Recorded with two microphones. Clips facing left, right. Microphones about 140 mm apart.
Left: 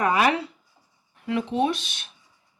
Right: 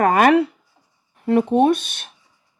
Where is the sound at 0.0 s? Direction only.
50° right (ahead or behind).